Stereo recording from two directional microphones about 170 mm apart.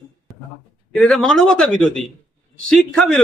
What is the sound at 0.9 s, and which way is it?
A man's voice, 5° left (ahead or behind).